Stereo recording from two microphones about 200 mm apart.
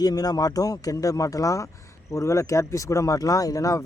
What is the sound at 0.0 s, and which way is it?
Speech, 20° left (ahead or behind).